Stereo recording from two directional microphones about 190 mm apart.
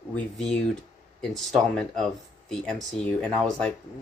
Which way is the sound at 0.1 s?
5° left (ahead or behind).